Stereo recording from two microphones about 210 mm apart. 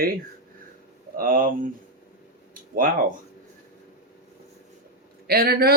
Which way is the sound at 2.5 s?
40° right (ahead or behind).